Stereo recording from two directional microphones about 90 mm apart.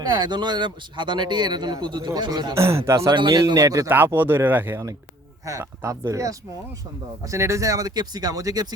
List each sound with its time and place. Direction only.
0.1 s speech: 55° right (ahead or behind)
2.6 s speech: 30° right (ahead or behind)
3.1 s a man's voice: 55° right (ahead or behind)
3.4 s speech: 40° right (ahead or behind)
3.8 s speech: 25° right (ahead or behind)
5.5 s speech: 35° right (ahead or behind)